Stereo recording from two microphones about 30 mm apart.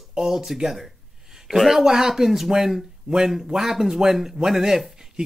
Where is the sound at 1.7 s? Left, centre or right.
Centre.